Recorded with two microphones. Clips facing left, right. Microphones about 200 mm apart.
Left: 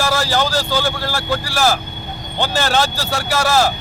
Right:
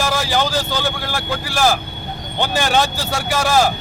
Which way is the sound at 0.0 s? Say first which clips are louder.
Left 1 dB; 15° right (ahead or behind).